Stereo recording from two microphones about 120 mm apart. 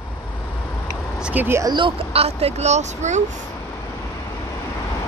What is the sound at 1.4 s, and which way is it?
Speech, 20° right (ahead or behind).